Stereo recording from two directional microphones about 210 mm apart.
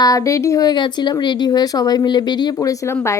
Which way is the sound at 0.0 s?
15° left (ahead or behind).